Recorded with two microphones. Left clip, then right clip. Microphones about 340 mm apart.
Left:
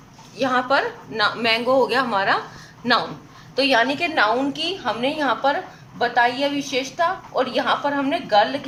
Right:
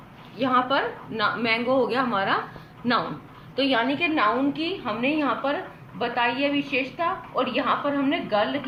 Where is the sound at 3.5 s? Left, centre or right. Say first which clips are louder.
Left 5 dB; left.